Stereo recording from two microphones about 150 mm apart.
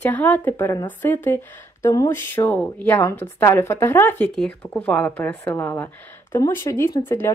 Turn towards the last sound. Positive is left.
turn(degrees=15)  # may be behind; listen again after turning